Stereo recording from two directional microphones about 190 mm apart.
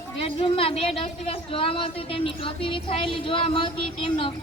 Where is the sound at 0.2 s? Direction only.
30° left (ahead or behind).